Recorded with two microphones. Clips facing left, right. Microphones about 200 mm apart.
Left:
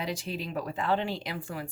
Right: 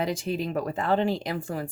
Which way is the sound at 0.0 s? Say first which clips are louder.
Right 6 dB; 50° right (ahead or behind).